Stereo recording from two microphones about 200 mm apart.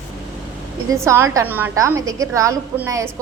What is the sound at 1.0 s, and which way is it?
A woman's voice, 15° right (ahead or behind).